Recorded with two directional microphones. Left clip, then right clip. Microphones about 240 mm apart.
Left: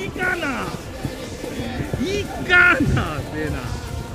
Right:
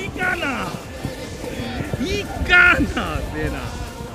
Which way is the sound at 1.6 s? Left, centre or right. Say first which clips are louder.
Even; right.